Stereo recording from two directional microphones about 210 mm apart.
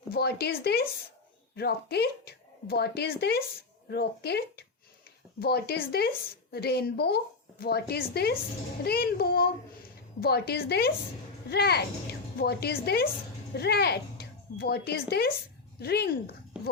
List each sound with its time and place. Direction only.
0.1 s speech: 50° left (ahead or behind)